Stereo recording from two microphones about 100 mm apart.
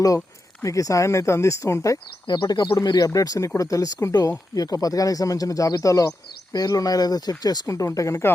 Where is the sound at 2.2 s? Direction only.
50° left (ahead or behind).